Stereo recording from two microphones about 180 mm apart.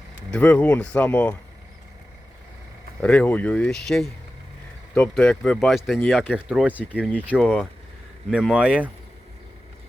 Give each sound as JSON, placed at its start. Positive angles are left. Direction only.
{"t": 0.3, "sound": "speech", "side_deg": 10}
{"t": 3.0, "sound": "speech", "side_deg": 5}
{"t": 6.9, "sound": "speech", "side_deg": 5}
{"t": 7.2, "sound": "speech", "side_deg": -10}